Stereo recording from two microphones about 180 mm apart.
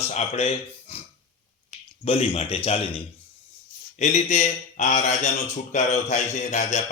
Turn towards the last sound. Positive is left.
turn(degrees=40)  # may be behind; listen again after turning